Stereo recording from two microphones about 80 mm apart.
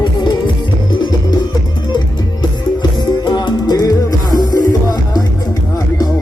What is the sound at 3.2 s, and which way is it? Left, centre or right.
Music, left.